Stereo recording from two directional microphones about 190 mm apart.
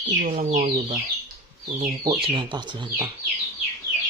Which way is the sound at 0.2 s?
40° right (ahead or behind).